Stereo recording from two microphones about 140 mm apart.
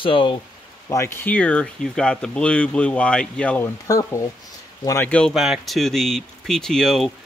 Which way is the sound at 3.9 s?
20° left (ahead or behind).